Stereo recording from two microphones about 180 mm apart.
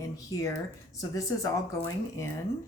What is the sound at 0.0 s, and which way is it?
Speech, 20° left (ahead or behind).